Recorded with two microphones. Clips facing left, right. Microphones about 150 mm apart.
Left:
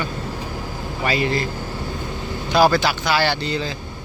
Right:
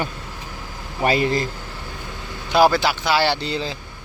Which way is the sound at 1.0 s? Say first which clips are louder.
Right 2 dB; 45° right (ahead or behind).